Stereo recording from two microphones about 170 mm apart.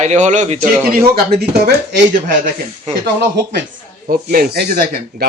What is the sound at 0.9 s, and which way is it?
Speech, 60° right (ahead or behind).